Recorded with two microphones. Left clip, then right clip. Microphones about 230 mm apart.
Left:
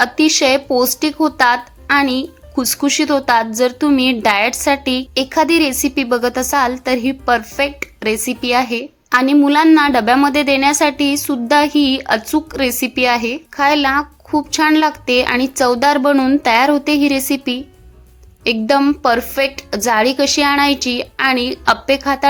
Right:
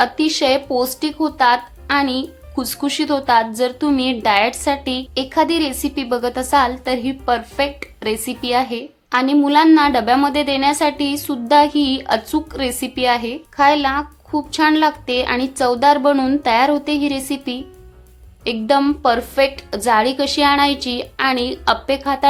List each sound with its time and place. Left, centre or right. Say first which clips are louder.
0.0 s a woman's voice: left 3 dB; left